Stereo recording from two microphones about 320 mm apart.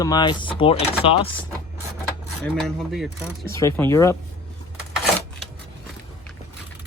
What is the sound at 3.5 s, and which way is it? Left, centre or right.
Speech, centre.